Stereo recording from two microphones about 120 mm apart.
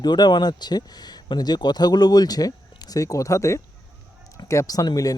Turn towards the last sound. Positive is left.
turn(degrees=30)  # may be behind; listen again after turning